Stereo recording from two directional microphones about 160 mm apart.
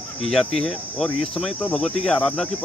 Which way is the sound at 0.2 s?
Centre (ahead or behind).